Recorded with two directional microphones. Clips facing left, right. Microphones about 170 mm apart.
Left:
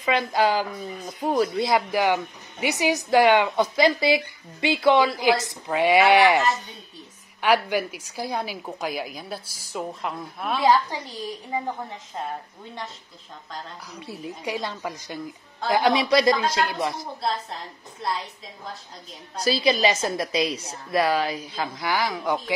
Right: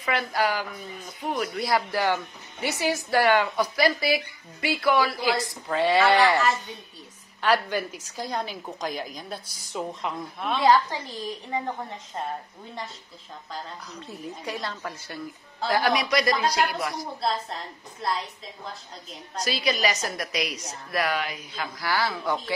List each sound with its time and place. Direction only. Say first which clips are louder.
0.0 s speech: left 4 dB; 20° left (ahead or behind); by 1.5 s 35° left (ahead or behind)
1.6 s a woman's voice: left 3 dB; 20° left (ahead or behind); by 12.3 s 5° left (ahead or behind)
13.9 s a woman's voice: left 3 dB; 10° left (ahead or behind)
15.7 s speech: left 4 dB; 25° left (ahead or behind)
19.4 s speech: left 5 dB; 30° left (ahead or behind)
21.7 s a woman's voice: even; 20° left (ahead or behind)